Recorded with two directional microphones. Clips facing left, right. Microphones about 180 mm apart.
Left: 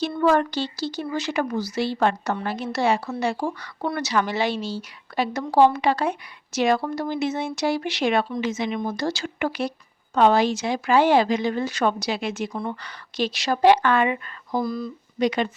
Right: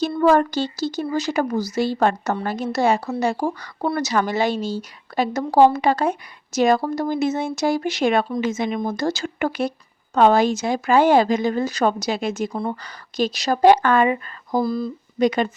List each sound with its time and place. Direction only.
0.0 s speech: 40° right (ahead or behind)
15.2 s speech: 45° right (ahead or behind)